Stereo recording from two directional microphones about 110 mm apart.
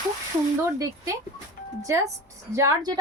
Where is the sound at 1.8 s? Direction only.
30° right (ahead or behind).